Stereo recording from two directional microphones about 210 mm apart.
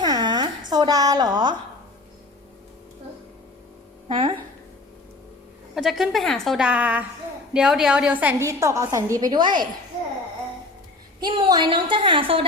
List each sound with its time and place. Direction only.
0.0 s a sound: 20° right (ahead or behind)
4.1 s a woman's voice: 25° right (ahead or behind)
5.7 s a woman's voice: centre (ahead or behind); by 9.6 s 20° right (ahead or behind)
11.2 s a woman's voice: 20° right (ahead or behind)